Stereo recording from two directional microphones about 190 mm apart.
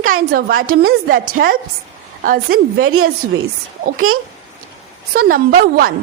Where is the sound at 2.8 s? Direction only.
90° right.